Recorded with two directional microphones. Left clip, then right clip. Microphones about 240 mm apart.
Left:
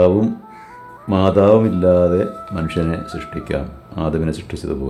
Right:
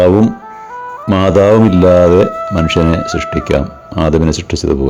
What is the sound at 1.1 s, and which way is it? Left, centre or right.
Speech, right.